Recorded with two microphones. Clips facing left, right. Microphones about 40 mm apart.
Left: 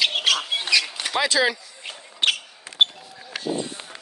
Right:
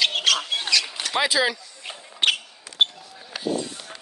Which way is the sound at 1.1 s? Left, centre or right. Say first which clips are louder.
Left 1 dB; centre.